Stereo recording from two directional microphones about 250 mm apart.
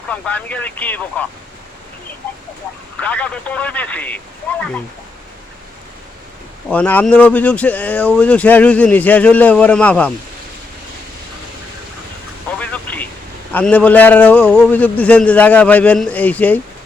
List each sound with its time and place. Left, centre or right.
0.1 s speech: centre
3.0 s speech: centre
6.7 s speech: centre
12.5 s vehicle: centre
13.5 s speech: centre